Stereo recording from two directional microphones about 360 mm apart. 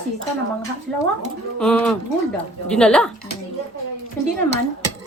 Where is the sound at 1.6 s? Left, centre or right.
Centre.